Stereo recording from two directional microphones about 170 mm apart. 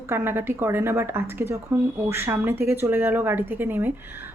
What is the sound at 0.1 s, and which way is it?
Speech, 15° right (ahead or behind).